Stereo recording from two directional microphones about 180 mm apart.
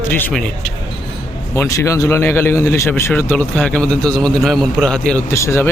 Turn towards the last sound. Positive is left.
turn(degrees=15)  # may be behind; listen again after turning